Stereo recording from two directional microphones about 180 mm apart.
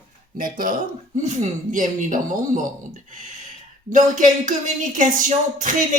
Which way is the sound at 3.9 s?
45° right (ahead or behind).